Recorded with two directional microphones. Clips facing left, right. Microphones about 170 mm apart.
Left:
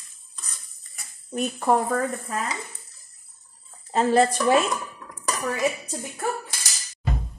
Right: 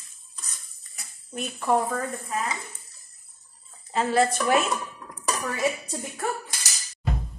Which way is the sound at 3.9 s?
35° left (ahead or behind).